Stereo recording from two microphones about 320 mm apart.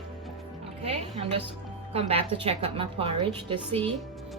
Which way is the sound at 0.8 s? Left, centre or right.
Centre.